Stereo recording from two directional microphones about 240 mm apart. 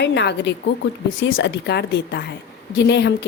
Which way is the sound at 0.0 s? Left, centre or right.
Left.